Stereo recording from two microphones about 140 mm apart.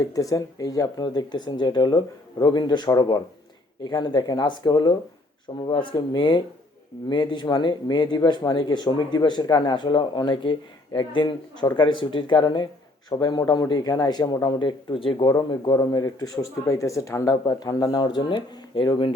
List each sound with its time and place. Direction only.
0.0 s a man's voice: 25° left (ahead or behind)